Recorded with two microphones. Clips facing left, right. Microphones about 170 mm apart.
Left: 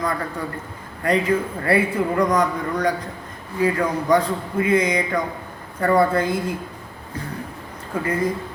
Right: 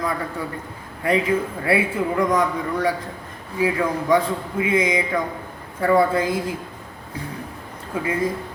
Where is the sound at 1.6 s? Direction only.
5° right (ahead or behind).